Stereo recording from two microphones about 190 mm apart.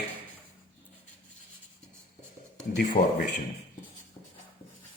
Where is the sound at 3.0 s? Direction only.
30° left (ahead or behind).